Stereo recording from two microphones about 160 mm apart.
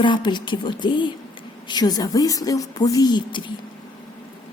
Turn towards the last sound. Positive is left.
turn(degrees=30)  # may be behind; listen again after turning